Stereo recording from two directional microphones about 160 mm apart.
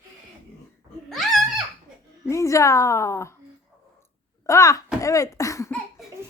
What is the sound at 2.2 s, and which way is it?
A woman's voice, 20° left (ahead or behind).